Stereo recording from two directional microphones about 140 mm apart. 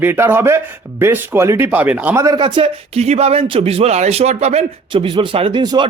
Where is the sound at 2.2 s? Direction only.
25° right (ahead or behind).